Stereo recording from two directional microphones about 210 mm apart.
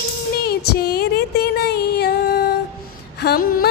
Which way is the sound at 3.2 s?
45° left (ahead or behind).